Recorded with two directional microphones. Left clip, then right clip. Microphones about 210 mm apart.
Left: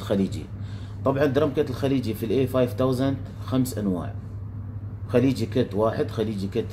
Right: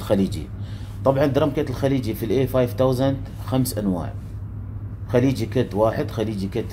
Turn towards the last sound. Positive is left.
turn(degrees=-30)  # may be behind; listen again after turning